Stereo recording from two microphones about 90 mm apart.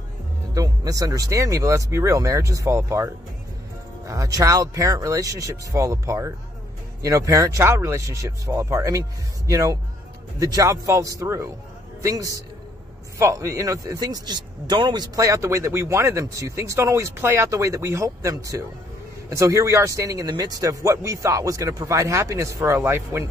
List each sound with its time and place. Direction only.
0.6 s speech: 40° right (ahead or behind)
4.1 s a man's voice: 40° right (ahead or behind); by 15.0 s 55° right (ahead or behind)
15.1 s speech: 40° right (ahead or behind)